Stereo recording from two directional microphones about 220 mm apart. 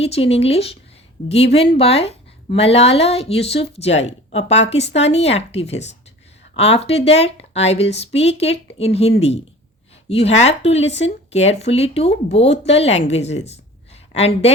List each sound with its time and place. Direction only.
0.0 s a woman's voice: 25° left (ahead or behind)